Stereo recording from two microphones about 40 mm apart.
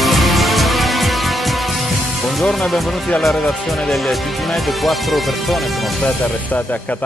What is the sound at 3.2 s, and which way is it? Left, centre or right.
Speech, centre.